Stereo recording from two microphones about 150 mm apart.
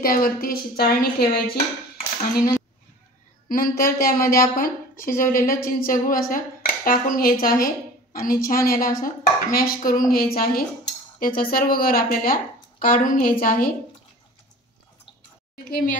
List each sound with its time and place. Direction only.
0.0 s speech: 75° left (ahead or behind)
3.4 s a woman's voice: 70° left (ahead or behind)
15.5 s a woman's voice: 70° left (ahead or behind)